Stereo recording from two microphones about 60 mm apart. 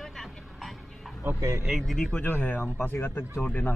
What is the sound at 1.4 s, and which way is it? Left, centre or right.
Speech, right.